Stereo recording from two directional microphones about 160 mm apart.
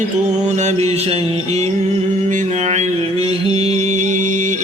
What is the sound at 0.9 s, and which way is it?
Mantra, 40° right (ahead or behind).